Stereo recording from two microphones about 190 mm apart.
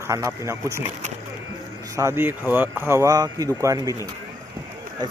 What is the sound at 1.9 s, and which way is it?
Speech, 15° right (ahead or behind).